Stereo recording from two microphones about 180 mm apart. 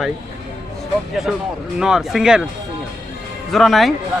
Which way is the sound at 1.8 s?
5° right (ahead or behind).